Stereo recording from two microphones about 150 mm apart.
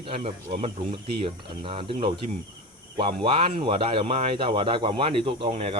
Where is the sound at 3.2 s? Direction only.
35° right (ahead or behind).